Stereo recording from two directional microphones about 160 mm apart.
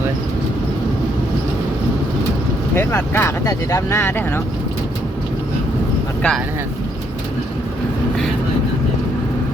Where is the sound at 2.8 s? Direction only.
15° left (ahead or behind).